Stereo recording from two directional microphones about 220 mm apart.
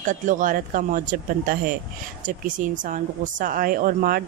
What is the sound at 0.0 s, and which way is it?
A woman's voice, 35° right (ahead or behind).